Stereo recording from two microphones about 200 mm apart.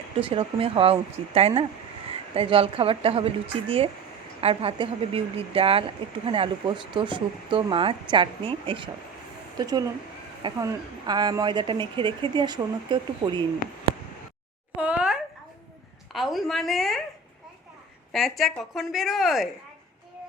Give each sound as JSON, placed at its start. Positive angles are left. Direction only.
{"t": 0.2, "sound": "speech", "side_deg": -25}
{"t": 14.8, "sound": "a sound", "side_deg": -5}
{"t": 16.1, "sound": "a woman's voice", "side_deg": 0}
{"t": 18.1, "sound": "a woman's voice", "side_deg": 0}